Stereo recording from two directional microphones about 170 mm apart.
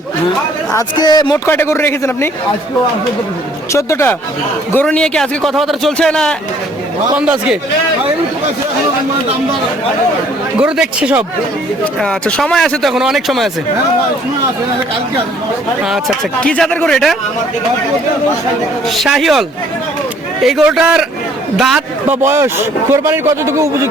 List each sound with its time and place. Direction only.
0.7 s a man's voice: 20° left (ahead or behind)
3.7 s a man's voice: 15° left (ahead or behind)
7.1 s a man's voice: 5° right (ahead or behind)
10.6 s speech: 5° right (ahead or behind)
11.9 s a man's voice: 5° left (ahead or behind)
15.8 s a man's voice: centre (ahead or behind)
18.9 s a man's voice: centre (ahead or behind)
22.2 s speech: 15° right (ahead or behind)